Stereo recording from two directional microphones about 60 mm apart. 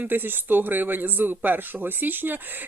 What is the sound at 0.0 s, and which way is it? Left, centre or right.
Speech, right.